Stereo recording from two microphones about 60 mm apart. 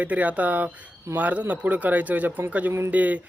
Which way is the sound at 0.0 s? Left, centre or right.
Right.